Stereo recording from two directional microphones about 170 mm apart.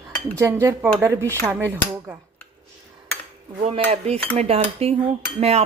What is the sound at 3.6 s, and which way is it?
Cutlery, 40° right (ahead or behind).